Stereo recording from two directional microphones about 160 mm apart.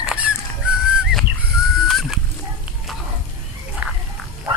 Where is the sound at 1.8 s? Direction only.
Centre (ahead or behind).